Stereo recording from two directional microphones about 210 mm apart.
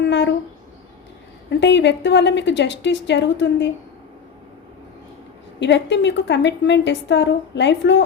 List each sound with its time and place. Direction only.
0.0 s speech: 55° left (ahead or behind)
1.5 s a woman's voice: 55° left (ahead or behind)
5.5 s a woman's voice: 55° left (ahead or behind)